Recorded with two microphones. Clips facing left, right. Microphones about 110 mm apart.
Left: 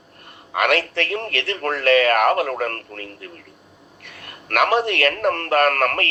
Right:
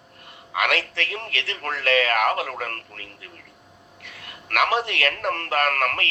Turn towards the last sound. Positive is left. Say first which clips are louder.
# left 5 dB
turn(degrees=50)  # may be behind; listen again after turning